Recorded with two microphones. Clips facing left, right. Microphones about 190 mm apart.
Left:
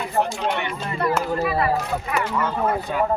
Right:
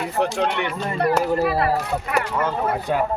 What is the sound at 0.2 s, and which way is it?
Speech, 70° right (ahead or behind).